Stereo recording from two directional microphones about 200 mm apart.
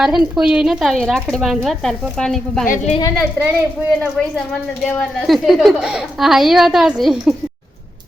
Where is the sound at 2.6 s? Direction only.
45° left (ahead or behind).